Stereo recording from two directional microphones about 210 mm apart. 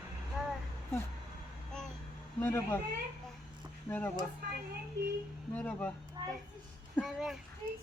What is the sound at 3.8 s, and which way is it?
Speech, 10° left (ahead or behind).